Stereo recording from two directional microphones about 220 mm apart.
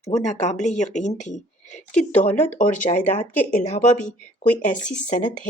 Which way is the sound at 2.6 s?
35° left (ahead or behind).